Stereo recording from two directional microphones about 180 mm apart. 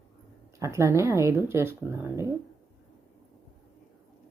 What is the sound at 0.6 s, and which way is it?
Speech, 15° right (ahead or behind).